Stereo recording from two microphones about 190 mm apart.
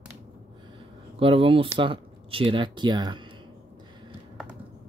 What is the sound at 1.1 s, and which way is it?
Speech, 30° right (ahead or behind).